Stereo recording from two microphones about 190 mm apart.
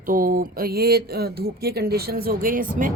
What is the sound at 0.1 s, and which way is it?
Speech, 45° right (ahead or behind).